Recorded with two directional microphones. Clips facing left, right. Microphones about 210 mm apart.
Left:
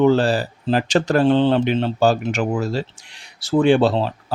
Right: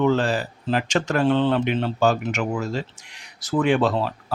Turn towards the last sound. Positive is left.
turn(degrees=30)  # may be behind; listen again after turning